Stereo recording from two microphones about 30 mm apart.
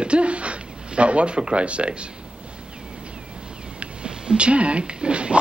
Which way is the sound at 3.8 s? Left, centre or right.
Right.